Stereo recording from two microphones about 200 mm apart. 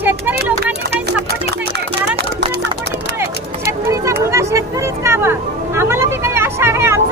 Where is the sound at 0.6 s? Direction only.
55° right (ahead or behind).